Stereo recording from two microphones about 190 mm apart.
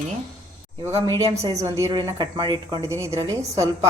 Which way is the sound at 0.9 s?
30° right (ahead or behind).